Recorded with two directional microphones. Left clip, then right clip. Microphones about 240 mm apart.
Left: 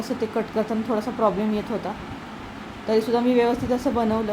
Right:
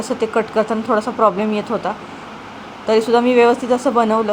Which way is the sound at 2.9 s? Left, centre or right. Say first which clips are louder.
Right 7 dB; centre.